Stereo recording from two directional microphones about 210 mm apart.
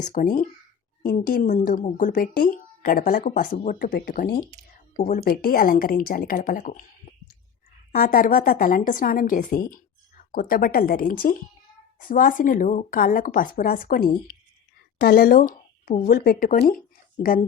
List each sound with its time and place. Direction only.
0.0 s speech: 40° left (ahead or behind)
7.9 s speech: 45° left (ahead or behind)